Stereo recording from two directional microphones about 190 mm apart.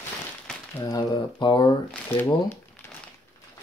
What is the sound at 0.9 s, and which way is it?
Speech, 20° left (ahead or behind).